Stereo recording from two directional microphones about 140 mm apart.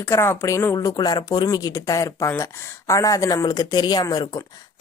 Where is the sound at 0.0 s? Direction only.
20° left (ahead or behind).